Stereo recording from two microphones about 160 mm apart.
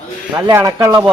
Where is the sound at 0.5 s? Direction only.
20° right (ahead or behind).